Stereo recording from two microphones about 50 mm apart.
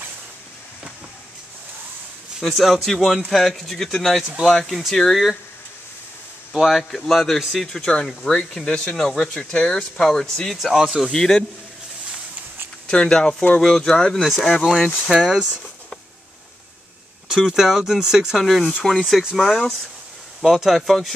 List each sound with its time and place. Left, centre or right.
2.4 s speech: centre
6.5 s speech: centre
8.9 s speech: centre
9.3 s speech: centre
10.6 s speech: centre
11.1 s speech: centre
12.8 s speech: centre
15.0 s speech: centre
17.3 s speech: centre
20.4 s speech: centre